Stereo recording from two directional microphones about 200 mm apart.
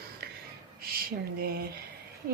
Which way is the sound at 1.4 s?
50° right (ahead or behind).